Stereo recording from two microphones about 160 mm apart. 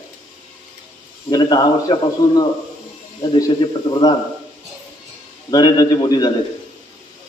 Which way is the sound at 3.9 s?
25° left (ahead or behind).